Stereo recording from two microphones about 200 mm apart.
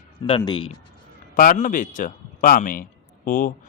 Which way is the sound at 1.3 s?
40° left (ahead or behind).